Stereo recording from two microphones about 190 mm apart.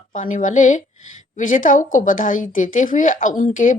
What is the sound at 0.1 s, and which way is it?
Speech, 45° left (ahead or behind).